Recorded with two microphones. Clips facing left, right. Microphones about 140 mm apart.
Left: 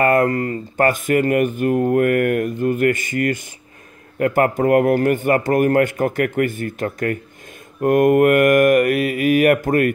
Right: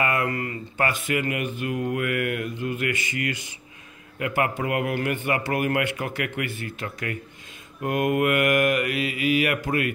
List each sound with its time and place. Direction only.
0.0 s speech: 45° left (ahead or behind)